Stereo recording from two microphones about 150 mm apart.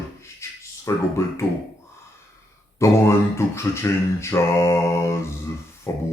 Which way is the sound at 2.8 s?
20° left (ahead or behind).